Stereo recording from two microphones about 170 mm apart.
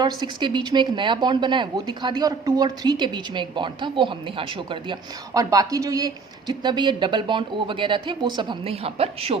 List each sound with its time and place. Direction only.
0.0 s speech: 25° right (ahead or behind)